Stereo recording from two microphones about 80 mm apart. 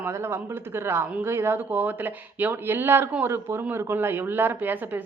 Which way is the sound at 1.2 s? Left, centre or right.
Right.